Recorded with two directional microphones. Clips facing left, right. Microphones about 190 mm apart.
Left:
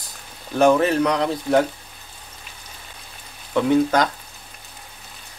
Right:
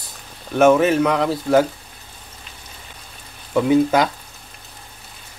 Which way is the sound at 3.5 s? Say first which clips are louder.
Right 2 dB; 5° right (ahead or behind).